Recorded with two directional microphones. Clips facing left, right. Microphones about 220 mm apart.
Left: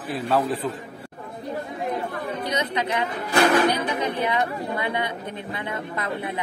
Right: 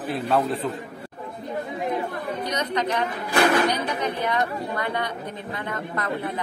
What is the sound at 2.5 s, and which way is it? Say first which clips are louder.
Chatter: even; 10° left (ahead or behind).